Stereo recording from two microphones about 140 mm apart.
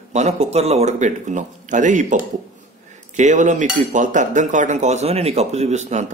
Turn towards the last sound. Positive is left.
turn(degrees=-55)  # may be behind; listen again after turning